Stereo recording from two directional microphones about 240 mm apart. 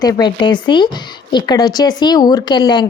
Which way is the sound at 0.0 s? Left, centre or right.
Centre.